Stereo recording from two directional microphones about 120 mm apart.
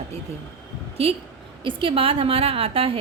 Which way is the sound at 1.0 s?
55° right (ahead or behind).